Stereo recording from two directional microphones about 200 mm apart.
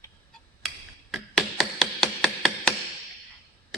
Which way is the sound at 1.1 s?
Centre (ahead or behind).